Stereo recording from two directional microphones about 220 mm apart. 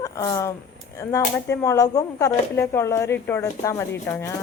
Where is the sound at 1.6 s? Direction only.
15° left (ahead or behind).